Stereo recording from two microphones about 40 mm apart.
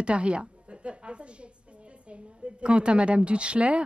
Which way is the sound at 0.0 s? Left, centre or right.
Right.